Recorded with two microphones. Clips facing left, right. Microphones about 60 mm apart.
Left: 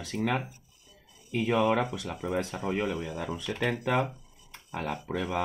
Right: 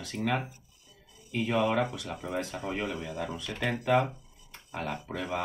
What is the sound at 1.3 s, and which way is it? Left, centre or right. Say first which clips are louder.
Speech: left 2 dB; centre.